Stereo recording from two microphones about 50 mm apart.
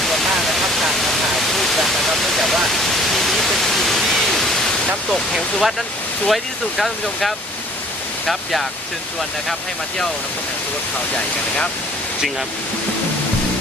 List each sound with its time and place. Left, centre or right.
0.0 s a sound: centre
5.1 s speech: centre
11.1 s speech: left